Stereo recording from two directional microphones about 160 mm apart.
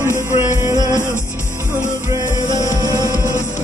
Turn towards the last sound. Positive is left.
turn(degrees=20)  # may be behind; listen again after turning